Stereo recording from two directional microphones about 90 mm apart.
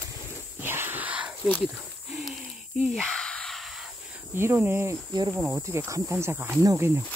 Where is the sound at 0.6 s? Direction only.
25° right (ahead or behind).